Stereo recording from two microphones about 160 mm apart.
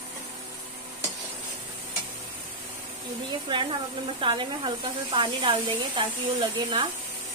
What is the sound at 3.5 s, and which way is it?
Speech, 30° right (ahead or behind).